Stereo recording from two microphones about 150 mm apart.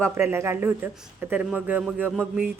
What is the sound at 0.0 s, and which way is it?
Speech, 15° right (ahead or behind).